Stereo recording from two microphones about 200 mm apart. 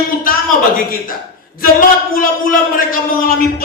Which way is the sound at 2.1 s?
45° left (ahead or behind).